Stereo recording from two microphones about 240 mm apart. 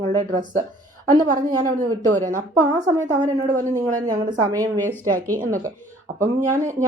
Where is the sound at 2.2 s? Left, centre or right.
Right.